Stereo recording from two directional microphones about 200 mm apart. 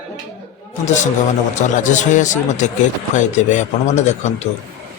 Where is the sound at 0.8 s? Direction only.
35° left (ahead or behind).